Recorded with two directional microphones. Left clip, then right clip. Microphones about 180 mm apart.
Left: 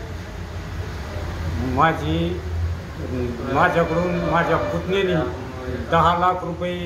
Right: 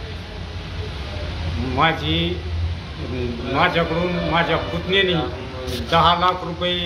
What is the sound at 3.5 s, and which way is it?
A man's voice, centre (ahead or behind).